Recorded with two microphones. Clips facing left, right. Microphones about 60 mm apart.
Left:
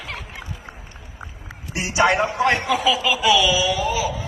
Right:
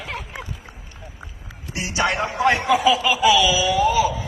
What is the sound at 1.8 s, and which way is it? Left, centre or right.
Speech, left.